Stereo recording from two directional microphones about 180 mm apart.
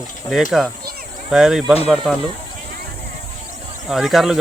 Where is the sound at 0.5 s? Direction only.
Centre (ahead or behind).